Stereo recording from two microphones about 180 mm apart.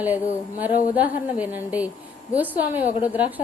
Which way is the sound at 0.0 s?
10° right (ahead or behind).